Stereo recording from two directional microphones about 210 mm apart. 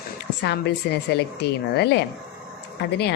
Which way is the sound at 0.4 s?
50° left (ahead or behind).